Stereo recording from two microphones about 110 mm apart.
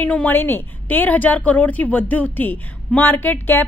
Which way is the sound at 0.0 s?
15° left (ahead or behind).